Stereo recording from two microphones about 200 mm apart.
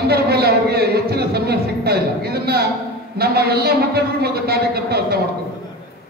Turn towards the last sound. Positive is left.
turn(degrees=-50)  # may be behind; listen again after turning